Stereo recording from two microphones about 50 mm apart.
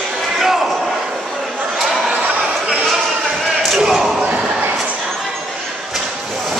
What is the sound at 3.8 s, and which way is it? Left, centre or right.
Slam, centre.